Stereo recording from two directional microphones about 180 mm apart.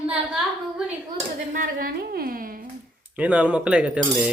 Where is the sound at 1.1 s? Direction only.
50° right (ahead or behind).